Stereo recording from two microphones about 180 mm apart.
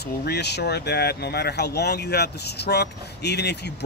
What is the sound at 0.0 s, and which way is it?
Speech, 65° left (ahead or behind).